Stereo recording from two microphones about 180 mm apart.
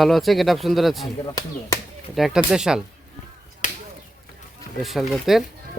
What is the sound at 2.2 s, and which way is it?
Speech, centre (ahead or behind).